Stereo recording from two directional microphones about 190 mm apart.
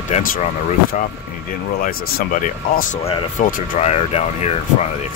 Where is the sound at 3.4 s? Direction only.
40° left (ahead or behind).